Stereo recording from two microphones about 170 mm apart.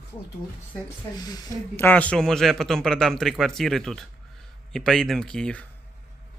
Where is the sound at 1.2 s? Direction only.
25° left (ahead or behind).